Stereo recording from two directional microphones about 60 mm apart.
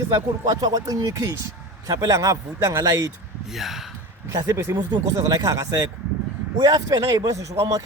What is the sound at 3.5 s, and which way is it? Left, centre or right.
Speech, centre.